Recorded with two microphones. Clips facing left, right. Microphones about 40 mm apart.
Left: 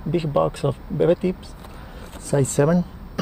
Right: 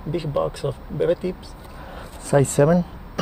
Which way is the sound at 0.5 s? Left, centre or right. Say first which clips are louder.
Left 3 dB; left.